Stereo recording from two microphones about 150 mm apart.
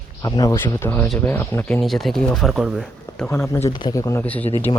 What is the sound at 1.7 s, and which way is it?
Speech, centre (ahead or behind).